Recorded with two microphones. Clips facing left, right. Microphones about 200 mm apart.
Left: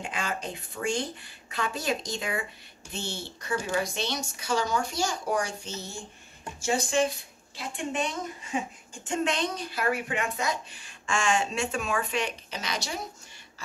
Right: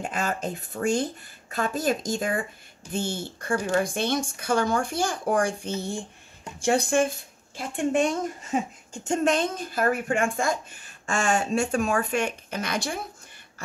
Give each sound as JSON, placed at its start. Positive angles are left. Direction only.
{"t": 0.0, "sound": "speech", "side_deg": -45}